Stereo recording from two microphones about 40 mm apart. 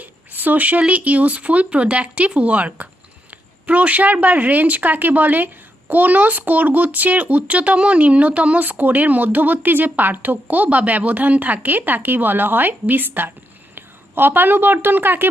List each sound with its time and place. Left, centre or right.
0.0 s a woman's voice: right